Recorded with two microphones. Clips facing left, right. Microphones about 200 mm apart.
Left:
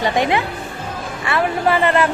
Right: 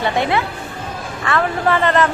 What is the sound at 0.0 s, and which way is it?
A woman's voice, 15° left (ahead or behind).